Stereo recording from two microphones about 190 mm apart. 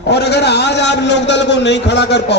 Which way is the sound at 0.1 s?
60° left (ahead or behind).